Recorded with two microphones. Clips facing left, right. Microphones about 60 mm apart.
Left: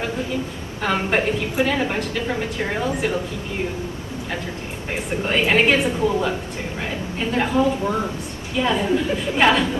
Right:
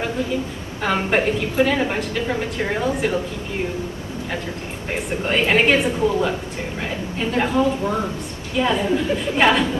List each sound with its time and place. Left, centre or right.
0.8 s a woman's voice: centre
4.9 s a woman's voice: centre